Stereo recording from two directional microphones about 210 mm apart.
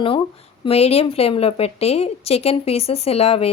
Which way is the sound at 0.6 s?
30° left (ahead or behind).